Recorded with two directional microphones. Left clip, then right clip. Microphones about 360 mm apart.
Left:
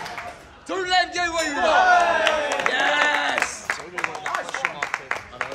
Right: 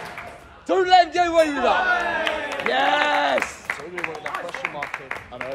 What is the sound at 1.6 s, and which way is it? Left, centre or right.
Speech, left.